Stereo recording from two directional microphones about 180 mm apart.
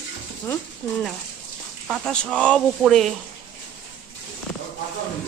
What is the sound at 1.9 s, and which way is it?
Speech, 5° left (ahead or behind).